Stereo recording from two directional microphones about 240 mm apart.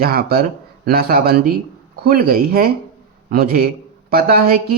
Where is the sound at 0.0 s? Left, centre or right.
Right.